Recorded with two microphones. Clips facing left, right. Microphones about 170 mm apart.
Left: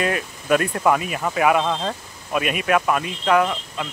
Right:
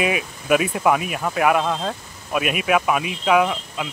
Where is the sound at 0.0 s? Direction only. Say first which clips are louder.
Right 1 dB; 5° right (ahead or behind).